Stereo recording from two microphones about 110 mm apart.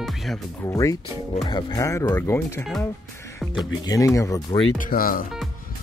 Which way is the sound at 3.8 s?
30° left (ahead or behind).